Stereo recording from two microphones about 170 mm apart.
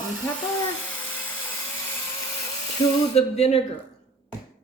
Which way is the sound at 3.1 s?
40° left (ahead or behind).